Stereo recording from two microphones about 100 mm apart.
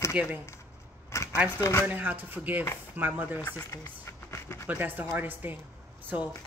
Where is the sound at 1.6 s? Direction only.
25° left (ahead or behind).